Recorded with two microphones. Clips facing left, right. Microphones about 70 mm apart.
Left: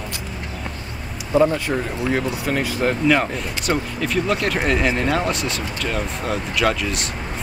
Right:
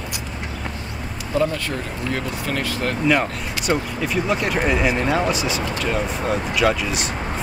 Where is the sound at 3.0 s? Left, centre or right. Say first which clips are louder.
Right 2 dB; centre.